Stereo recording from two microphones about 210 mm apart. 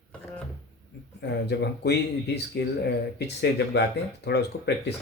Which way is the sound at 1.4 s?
50° left (ahead or behind).